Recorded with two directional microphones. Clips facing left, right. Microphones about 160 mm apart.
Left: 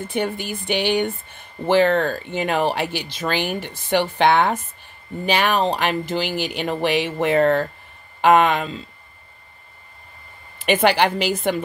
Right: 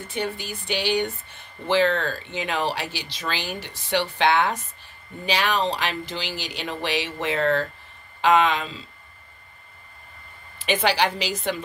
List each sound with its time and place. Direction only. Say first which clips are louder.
0.1 s speech: left 4 dB; 55° left (ahead or behind)
10.6 s speech: left 5 dB; 55° left (ahead or behind)